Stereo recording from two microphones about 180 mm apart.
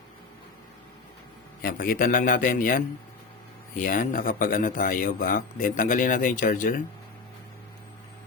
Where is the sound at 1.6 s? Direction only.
55° left (ahead or behind).